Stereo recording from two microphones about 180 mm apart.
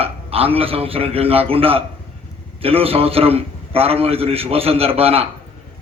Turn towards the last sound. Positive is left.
turn(degrees=-30)  # may be behind; listen again after turning